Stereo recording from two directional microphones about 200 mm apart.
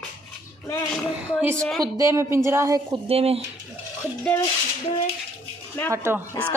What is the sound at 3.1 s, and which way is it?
Speech, 30° right (ahead or behind).